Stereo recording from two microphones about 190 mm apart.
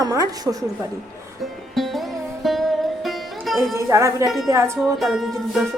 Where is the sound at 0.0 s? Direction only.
20° right (ahead or behind).